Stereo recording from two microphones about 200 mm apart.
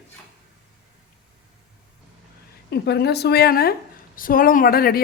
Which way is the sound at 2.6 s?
55° left (ahead or behind).